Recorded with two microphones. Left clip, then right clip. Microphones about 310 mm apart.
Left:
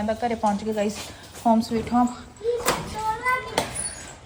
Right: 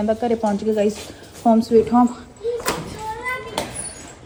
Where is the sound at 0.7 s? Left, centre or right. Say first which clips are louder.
Right 6 dB; left.